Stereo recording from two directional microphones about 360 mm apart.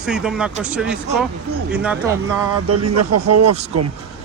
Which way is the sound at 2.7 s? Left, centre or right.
Right.